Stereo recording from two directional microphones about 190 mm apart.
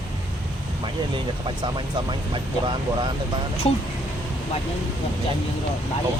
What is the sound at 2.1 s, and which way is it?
Speech, 25° right (ahead or behind).